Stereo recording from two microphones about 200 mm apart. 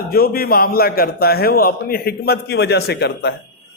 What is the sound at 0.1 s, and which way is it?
A man's voice, 50° left (ahead or behind).